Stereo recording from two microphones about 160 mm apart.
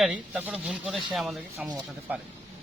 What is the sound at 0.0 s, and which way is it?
Speech, 10° right (ahead or behind).